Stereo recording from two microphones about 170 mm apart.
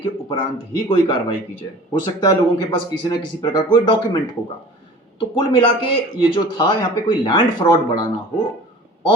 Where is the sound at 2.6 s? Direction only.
25° left (ahead or behind).